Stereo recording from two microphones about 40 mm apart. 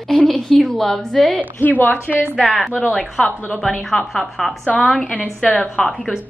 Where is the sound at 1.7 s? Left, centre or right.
Left.